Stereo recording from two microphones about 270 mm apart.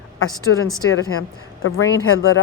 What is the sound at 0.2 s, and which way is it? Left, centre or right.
A woman's voice, left.